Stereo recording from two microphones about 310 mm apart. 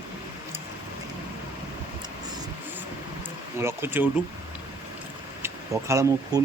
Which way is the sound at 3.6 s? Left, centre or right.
Centre.